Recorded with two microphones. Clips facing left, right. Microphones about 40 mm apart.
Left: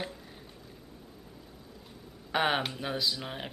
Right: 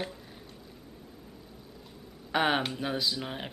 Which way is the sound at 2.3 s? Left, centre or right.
Centre.